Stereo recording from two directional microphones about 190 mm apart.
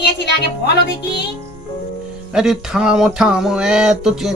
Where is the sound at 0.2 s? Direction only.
60° left (ahead or behind).